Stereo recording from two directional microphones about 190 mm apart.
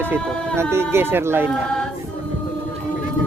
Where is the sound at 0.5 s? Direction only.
15° right (ahead or behind).